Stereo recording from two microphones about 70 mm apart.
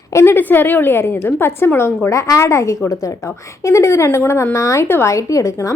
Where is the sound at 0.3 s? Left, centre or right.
Left.